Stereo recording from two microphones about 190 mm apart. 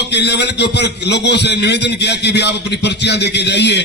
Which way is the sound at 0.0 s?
65° left (ahead or behind).